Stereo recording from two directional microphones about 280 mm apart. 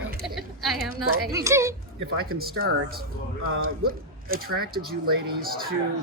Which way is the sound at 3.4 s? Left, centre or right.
Right.